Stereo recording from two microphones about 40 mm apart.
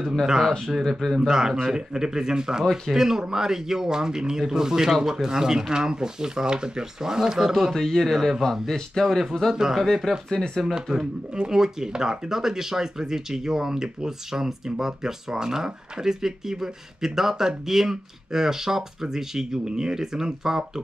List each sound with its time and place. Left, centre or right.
0.4 s speech: centre
1.2 s speech: centre
7.5 s speech: centre
9.5 s speech: centre
10.1 s speech: centre
11.3 s speech: centre